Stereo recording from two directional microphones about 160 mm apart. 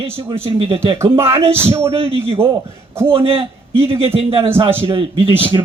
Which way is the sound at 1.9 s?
35° right (ahead or behind).